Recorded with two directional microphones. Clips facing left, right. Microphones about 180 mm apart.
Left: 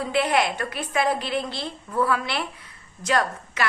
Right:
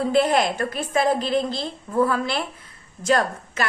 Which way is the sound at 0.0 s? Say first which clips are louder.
Right 3 dB; 40° right (ahead or behind).